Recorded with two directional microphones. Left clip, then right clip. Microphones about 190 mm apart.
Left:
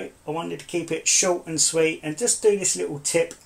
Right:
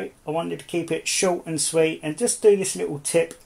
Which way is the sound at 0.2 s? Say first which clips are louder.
Right 3 dB; 45° right (ahead or behind).